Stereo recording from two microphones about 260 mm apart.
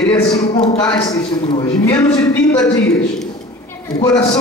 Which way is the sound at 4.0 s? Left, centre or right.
Centre.